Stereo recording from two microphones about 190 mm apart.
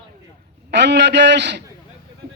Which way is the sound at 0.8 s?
65° right (ahead or behind).